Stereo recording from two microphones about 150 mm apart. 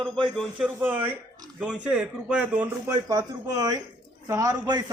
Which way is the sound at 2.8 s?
25° right (ahead or behind).